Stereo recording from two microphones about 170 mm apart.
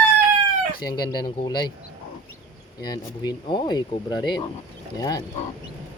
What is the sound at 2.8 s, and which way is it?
Speech, 25° left (ahead or behind).